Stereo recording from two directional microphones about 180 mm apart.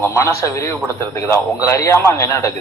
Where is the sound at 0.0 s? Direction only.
15° left (ahead or behind).